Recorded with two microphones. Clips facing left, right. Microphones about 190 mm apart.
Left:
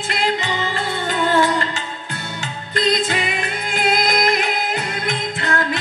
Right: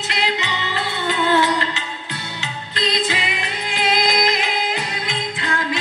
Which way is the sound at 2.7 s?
50° left (ahead or behind).